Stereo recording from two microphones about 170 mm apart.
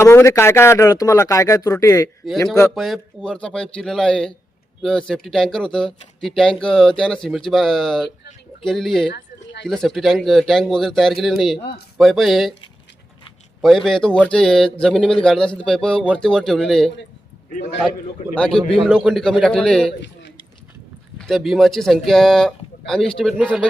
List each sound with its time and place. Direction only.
0.0 s speech: 15° left (ahead or behind)
2.7 s speech: centre (ahead or behind)
9.1 s a sound: 75° left (ahead or behind)
9.6 s speech: centre (ahead or behind)
13.6 s speech: centre (ahead or behind)
18.3 s speech: 5° left (ahead or behind)
21.2 s speech: centre (ahead or behind)